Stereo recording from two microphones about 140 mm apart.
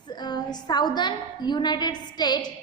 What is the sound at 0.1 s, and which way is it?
A woman's voice, 30° left (ahead or behind).